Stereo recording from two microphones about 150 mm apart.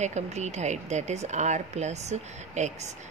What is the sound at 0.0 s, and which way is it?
Speech, 50° right (ahead or behind).